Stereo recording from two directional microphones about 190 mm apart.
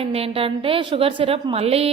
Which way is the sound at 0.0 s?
30° right (ahead or behind).